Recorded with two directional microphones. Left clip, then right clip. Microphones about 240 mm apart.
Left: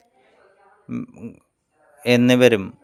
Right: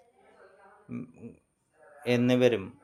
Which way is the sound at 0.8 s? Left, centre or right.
Left.